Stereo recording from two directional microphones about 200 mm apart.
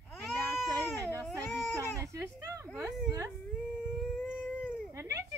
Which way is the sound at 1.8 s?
15° right (ahead or behind).